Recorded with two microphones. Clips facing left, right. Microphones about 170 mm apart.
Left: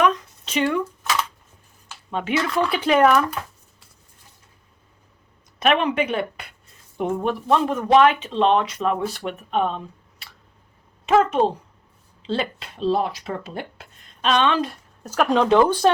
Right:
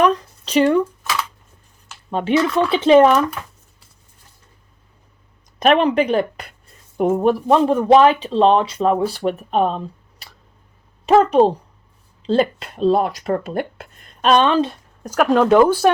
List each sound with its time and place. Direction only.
0.0 s a sound: 35° right (ahead or behind)
2.0 s speech: 35° right (ahead or behind)
5.5 s a woman's voice: 35° right (ahead or behind)
15.0 s speech: 5° right (ahead or behind)